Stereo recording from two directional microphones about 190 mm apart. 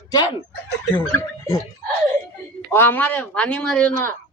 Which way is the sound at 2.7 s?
10° left (ahead or behind).